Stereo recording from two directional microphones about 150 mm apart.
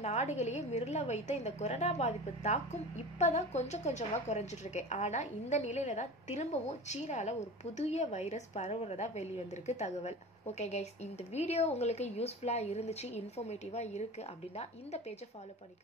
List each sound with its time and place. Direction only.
0.0 s a woman's voice: 45° left (ahead or behind)